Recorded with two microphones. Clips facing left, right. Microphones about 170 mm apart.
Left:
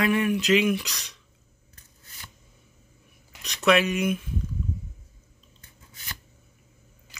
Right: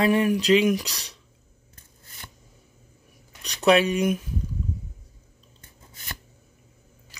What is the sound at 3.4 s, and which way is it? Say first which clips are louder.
Speech: right 2 dB; 35° right (ahead or behind).